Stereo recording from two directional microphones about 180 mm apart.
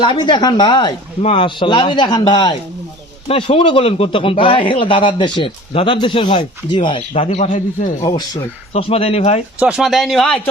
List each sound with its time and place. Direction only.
0.0 s a man's voice: 25° left (ahead or behind); by 7.9 s 45° left (ahead or behind)
8.7 s speech: 35° left (ahead or behind)
9.6 s speech: 5° right (ahead or behind)